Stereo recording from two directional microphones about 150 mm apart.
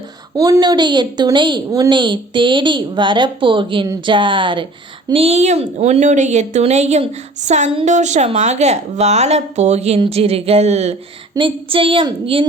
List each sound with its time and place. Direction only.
0.3 s a woman's voice: 25° right (ahead or behind)